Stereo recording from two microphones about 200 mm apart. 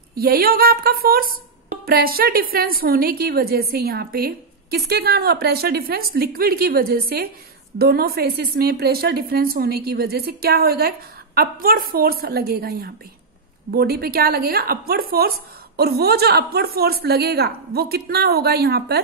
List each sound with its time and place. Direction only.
0.1 s a woman's voice: 50° right (ahead or behind)